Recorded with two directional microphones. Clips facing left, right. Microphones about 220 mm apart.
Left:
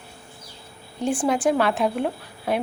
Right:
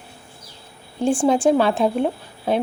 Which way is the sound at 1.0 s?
30° right (ahead or behind).